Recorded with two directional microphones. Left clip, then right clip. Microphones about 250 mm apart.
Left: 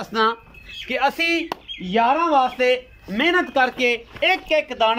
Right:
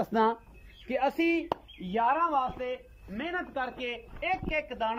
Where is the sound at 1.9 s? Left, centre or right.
Centre.